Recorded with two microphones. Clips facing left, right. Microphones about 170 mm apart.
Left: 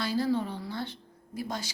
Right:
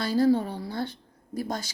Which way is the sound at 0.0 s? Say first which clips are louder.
Right 6 dB; 45° right (ahead or behind).